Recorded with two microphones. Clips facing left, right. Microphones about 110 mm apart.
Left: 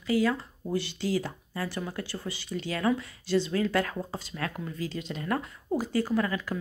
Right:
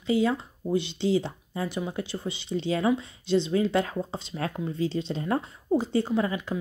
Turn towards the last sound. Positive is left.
turn(degrees=-20)  # may be behind; listen again after turning